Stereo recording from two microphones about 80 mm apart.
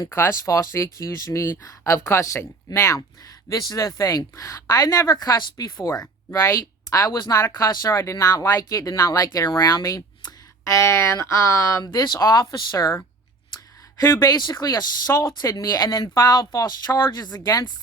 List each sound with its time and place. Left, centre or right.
0.1 s speech: left
3.5 s speech: left
11.8 s speech: left
12.8 s speech: left
14.0 s speech: left